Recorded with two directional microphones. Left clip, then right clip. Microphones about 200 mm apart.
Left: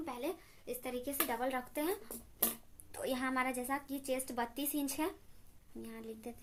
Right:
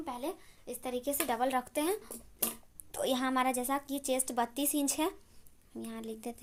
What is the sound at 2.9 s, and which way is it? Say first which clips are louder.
Speech: right 5 dB; 40° right (ahead or behind).